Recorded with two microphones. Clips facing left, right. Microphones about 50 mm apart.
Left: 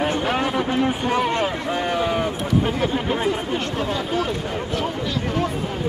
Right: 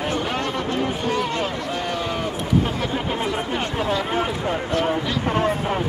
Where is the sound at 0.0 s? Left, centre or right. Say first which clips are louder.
Left 3 dB; centre.